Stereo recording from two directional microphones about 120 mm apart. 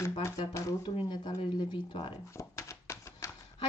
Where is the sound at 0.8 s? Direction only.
40° left (ahead or behind).